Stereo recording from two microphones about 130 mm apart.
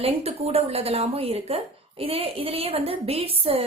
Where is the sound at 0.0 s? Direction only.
50° right (ahead or behind).